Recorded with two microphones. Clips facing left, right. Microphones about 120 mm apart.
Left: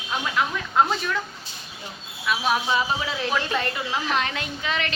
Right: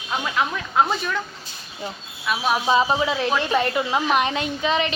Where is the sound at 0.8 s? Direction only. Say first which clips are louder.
Right 1 dB; 5° right (ahead or behind).